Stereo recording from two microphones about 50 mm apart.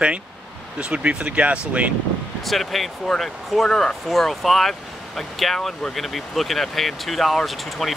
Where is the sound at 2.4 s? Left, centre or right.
Centre.